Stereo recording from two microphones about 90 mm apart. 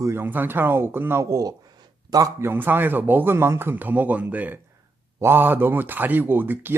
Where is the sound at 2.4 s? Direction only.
25° right (ahead or behind).